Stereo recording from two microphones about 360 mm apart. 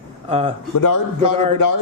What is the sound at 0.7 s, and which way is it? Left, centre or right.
Speech, left.